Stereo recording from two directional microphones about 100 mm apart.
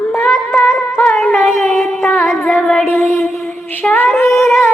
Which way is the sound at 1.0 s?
5° left (ahead or behind).